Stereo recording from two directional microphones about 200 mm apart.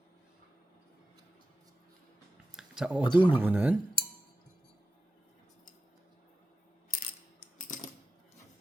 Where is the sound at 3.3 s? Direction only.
10° right (ahead or behind).